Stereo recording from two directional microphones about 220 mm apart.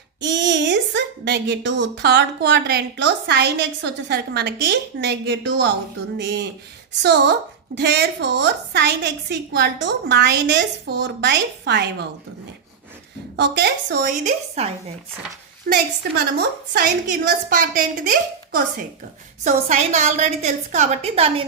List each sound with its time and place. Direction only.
0.2 s a woman's voice: 55° right (ahead or behind)
13.3 s a woman's voice: 50° right (ahead or behind); by 14.7 s 30° right (ahead or behind)
15.7 s a woman's voice: 45° right (ahead or behind); by 21.4 s 30° right (ahead or behind)